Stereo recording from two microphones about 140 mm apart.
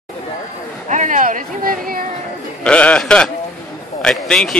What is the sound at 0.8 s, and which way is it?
Speech, 65° right (ahead or behind).